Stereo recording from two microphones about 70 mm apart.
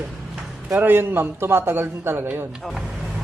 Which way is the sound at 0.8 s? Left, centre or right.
Right.